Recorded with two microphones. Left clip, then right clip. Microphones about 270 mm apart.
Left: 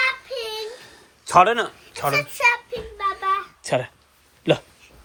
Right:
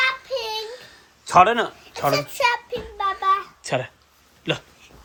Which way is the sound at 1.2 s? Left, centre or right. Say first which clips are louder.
Even; centre.